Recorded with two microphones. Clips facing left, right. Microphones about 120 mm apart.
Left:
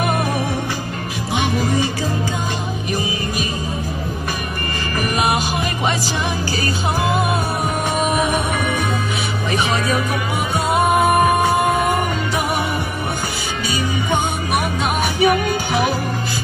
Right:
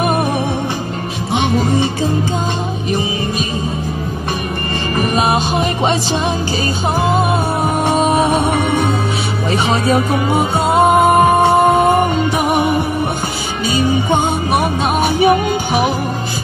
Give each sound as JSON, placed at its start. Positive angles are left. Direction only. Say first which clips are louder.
{"t": 0.0, "sound": "music", "louder": "right 4 dB", "side_deg": -20}
{"t": 1.3, "sound": "music", "louder": "right 4 dB", "side_deg": -25}
{"t": 2.9, "sound": "music", "louder": "right 5 dB", "side_deg": -25}
{"t": 4.9, "sound": "music", "louder": "right 4 dB", "side_deg": -25}
{"t": 7.0, "sound": "music", "louder": "right 4 dB", "side_deg": -25}